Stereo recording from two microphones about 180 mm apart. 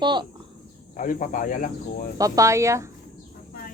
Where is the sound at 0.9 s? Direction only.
45° left (ahead or behind).